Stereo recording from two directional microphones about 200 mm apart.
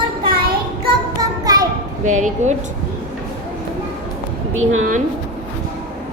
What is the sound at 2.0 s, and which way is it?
Speech, 40° right (ahead or behind).